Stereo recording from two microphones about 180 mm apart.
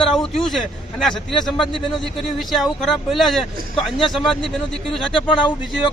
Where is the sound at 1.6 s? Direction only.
25° left (ahead or behind).